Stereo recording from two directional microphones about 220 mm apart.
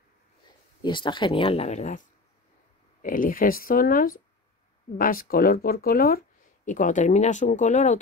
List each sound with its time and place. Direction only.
0.8 s speech: 20° left (ahead or behind)